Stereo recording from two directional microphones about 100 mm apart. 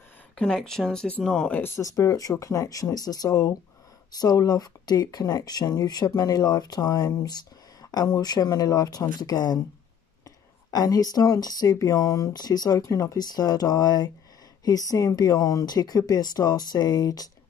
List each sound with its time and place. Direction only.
0.4 s speech: 5° left (ahead or behind)
1.6 s speech: 30° left (ahead or behind)
10.7 s speech: 40° left (ahead or behind)